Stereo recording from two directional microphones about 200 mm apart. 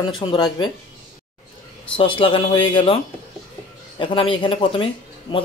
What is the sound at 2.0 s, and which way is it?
Speech, 25° left (ahead or behind).